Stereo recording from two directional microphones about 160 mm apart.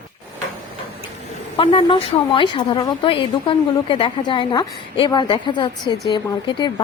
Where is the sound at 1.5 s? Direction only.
35° left (ahead or behind).